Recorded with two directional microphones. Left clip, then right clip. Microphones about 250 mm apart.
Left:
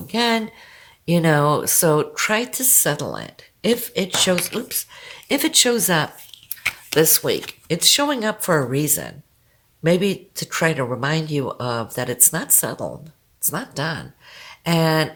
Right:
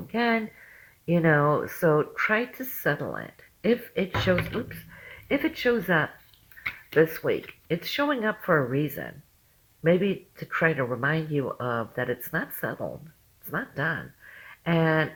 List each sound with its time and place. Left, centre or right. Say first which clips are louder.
0.1 s speech: left 6 dB; left
4.4 s speech: left 5 dB; left
4.7 s speech: left 10 dB; left